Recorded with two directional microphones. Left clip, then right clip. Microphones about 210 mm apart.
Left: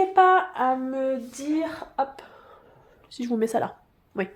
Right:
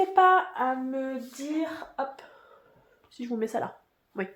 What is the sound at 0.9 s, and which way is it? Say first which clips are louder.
Female singing: left 6 dB; 55° left (ahead or behind).